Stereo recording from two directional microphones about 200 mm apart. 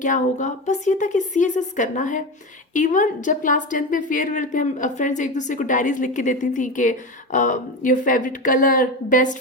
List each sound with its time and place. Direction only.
0.0 s a woman's voice: 40° left (ahead or behind)